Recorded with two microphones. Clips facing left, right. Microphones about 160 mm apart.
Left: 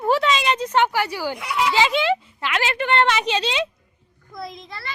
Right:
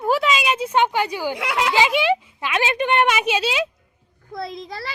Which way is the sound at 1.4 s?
80° right.